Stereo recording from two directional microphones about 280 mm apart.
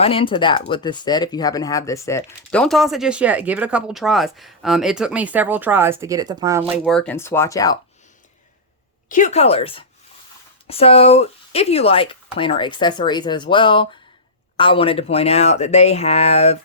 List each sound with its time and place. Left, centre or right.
0.0 s speech: centre
9.0 s speech: left